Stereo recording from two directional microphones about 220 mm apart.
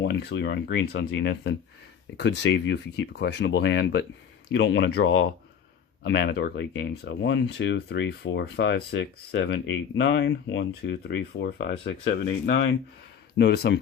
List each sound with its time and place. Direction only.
0.0 s speech: 50° left (ahead or behind)